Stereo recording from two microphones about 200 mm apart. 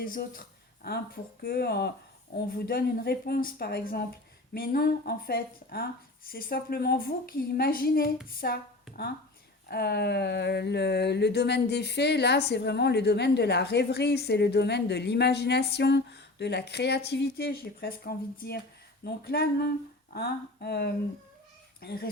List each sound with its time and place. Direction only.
0.0 s a woman's voice: 45° left (ahead or behind)
9.6 s a woman's voice: 55° left (ahead or behind)